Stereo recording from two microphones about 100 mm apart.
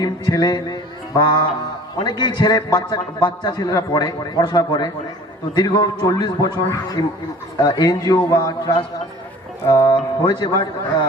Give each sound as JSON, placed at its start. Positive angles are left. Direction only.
{"t": 0.0, "sound": "mantra", "side_deg": 40}
{"t": 2.0, "sound": "a man's voice", "side_deg": 45}